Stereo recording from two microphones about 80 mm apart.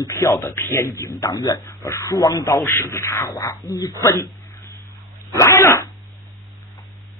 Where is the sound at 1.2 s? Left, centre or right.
Left.